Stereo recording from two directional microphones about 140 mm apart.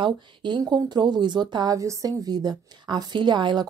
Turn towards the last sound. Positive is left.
turn(degrees=-35)  # may be behind; listen again after turning